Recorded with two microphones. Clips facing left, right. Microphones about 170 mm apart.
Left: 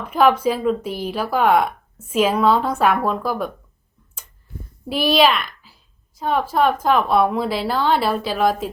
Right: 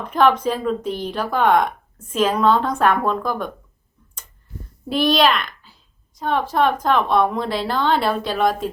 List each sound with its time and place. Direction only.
0.0 s speech: 5° left (ahead or behind)
4.9 s a child's voice: 5° left (ahead or behind)